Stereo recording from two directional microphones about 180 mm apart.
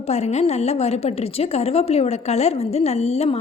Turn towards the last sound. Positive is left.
turn(degrees=35)  # may be behind; listen again after turning